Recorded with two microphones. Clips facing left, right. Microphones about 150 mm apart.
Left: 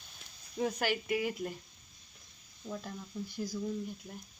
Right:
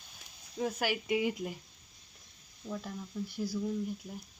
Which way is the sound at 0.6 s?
5° right (ahead or behind).